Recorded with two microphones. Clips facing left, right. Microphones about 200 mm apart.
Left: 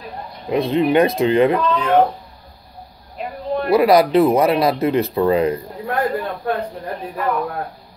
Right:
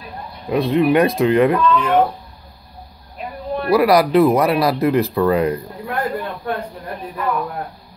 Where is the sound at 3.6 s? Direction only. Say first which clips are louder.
Even; 25° left (ahead or behind).